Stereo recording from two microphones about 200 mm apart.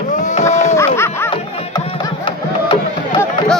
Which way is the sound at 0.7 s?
15° left (ahead or behind).